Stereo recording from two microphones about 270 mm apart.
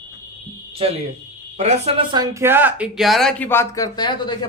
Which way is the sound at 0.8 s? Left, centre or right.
Right.